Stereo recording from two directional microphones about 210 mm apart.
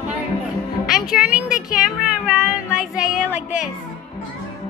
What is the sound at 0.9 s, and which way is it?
Child singing, 5° right (ahead or behind).